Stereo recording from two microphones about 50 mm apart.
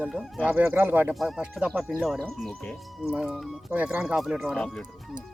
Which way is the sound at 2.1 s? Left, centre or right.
Centre.